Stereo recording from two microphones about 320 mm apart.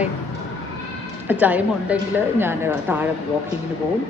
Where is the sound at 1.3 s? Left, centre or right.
Centre.